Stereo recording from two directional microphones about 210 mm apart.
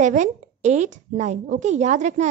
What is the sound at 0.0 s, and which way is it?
A woman's voice, 35° right (ahead or behind).